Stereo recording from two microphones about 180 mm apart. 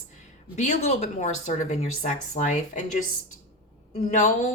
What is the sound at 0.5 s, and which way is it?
Speech, 40° left (ahead or behind).